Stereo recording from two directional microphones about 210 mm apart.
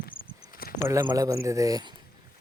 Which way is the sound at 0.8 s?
10° right (ahead or behind).